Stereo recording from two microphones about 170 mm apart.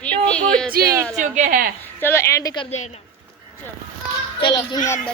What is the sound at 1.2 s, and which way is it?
Speech, 45° right (ahead or behind).